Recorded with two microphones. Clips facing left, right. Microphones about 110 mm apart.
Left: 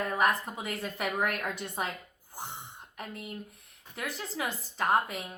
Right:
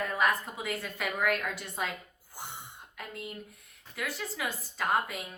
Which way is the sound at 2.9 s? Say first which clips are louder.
Left 1 dB; 25° left (ahead or behind).